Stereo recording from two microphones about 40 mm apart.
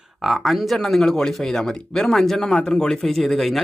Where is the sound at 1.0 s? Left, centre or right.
Centre.